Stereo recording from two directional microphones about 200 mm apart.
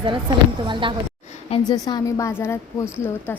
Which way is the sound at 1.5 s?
20° left (ahead or behind).